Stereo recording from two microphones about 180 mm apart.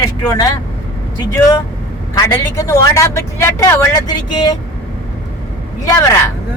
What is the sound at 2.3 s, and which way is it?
Speech, 15° left (ahead or behind).